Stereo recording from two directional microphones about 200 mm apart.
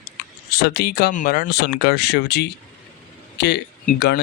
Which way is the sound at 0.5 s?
55° left (ahead or behind).